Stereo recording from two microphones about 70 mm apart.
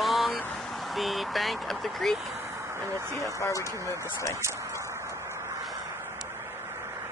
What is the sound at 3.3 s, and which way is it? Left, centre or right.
Speech, left.